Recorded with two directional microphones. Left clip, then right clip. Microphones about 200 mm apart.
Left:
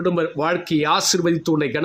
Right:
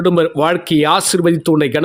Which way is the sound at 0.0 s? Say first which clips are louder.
Right 7 dB; 40° right (ahead or behind).